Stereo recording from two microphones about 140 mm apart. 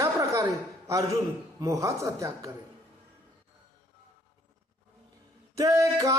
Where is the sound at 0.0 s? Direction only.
25° right (ahead or behind).